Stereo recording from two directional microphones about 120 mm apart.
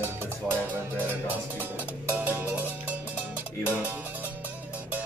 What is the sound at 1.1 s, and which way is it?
Music, 15° right (ahead or behind).